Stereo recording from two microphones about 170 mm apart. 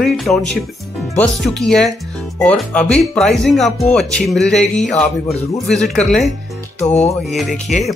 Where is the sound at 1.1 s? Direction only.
5° left (ahead or behind).